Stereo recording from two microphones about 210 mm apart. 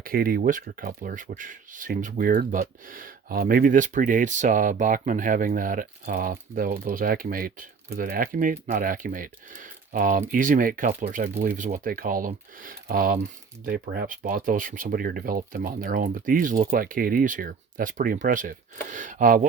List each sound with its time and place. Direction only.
0.0 s speech: 45° right (ahead or behind)